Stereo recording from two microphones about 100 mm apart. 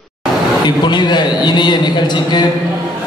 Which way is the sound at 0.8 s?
45° left (ahead or behind).